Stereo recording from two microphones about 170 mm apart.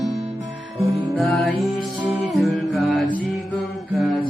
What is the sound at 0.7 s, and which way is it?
Music, 20° right (ahead or behind).